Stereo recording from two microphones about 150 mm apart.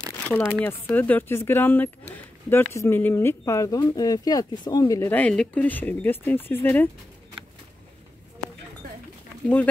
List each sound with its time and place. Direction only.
0.3 s speech: 10° left (ahead or behind)
5.1 s speech: 5° left (ahead or behind)